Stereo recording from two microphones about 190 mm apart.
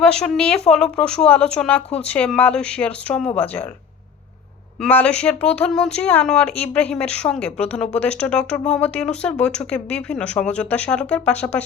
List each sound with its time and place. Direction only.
0.0 s speech: 5° left (ahead or behind)
3.2 s speech: 30° left (ahead or behind)
4.8 s speech: 5° left (ahead or behind)